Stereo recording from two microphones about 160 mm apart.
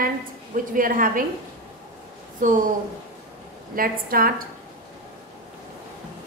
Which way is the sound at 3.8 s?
65° right (ahead or behind).